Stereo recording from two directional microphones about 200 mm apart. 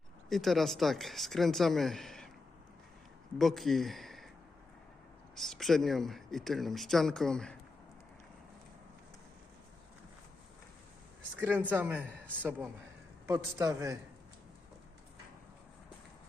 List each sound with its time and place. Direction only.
0.3 s speech: centre (ahead or behind)
3.3 s speech: centre (ahead or behind)
5.3 s speech: centre (ahead or behind)
11.7 s a man's voice: 10° right (ahead or behind)